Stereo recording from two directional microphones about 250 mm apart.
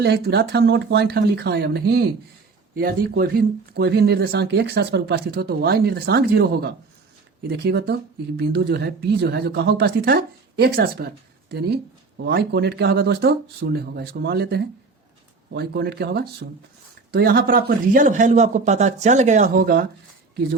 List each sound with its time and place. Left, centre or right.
0.0 s a man's voice: right